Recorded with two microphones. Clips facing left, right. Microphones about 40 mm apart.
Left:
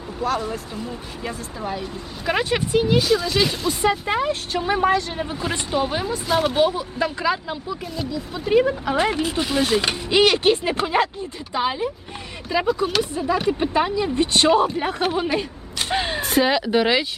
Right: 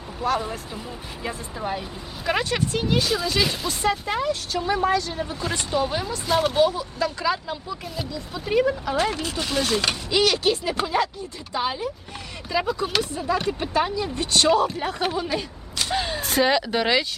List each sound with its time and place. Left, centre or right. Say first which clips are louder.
0.2 s speech: left 1 dB; centre
2.2 s speech: left 2 dB; centre
4.0 s speech: left 3 dB; left
5.3 s speech: left 2 dB; centre
8.6 s speech: left 2 dB; left
10.1 s speech: left 5 dB; left
11.5 s speech: left 3 dB; centre
15.4 s a sound: left 3 dB; left
16.2 s speech: left 1 dB; centre